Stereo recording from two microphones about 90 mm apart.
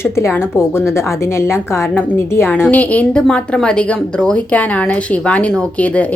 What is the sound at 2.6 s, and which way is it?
A woman's voice, 15° left (ahead or behind).